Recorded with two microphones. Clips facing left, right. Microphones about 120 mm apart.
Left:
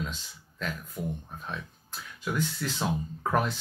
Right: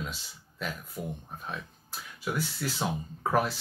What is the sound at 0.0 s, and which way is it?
Speech, 10° right (ahead or behind).